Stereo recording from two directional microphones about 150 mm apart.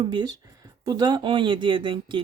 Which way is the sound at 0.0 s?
30° right (ahead or behind).